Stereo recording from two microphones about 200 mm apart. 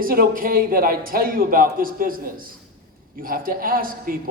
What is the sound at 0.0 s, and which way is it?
A man's voice, 45° right (ahead or behind).